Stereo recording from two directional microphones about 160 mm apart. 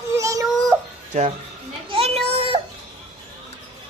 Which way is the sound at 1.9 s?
40° right (ahead or behind).